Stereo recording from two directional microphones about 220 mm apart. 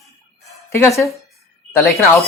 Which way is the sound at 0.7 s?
15° left (ahead or behind).